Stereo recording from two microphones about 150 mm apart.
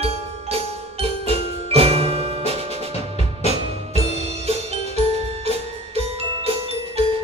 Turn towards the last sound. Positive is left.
turn(degrees=-45)  # may be behind; listen again after turning